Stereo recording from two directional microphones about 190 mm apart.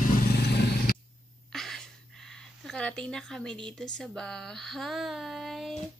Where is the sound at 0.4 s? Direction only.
60° left (ahead or behind).